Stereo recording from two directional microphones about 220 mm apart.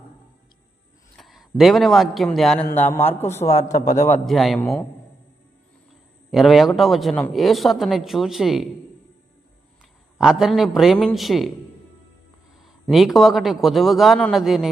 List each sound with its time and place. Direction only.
1.1 s a man's voice: centre (ahead or behind)
4.3 s speech: centre (ahead or behind)
6.3 s speech: centre (ahead or behind)
10.2 s speech: centre (ahead or behind)
12.6 s speech: centre (ahead or behind)